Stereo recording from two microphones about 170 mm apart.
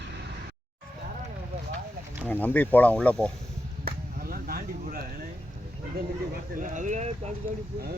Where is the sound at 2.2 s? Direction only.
10° left (ahead or behind).